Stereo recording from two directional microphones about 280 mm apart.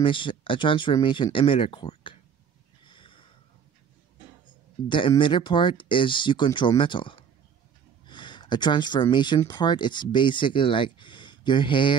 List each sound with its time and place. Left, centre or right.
0.0 s speech: centre
2.8 s a sound: centre
4.8 s speech: centre